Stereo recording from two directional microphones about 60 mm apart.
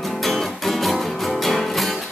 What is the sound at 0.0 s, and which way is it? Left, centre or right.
Music, centre.